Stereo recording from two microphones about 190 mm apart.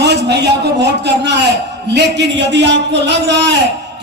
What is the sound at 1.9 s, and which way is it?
A man's voice, 65° right (ahead or behind).